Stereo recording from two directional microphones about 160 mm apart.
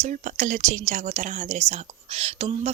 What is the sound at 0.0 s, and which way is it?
Speech, 50° right (ahead or behind).